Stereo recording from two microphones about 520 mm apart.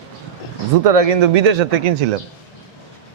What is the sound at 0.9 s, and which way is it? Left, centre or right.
Speech, right.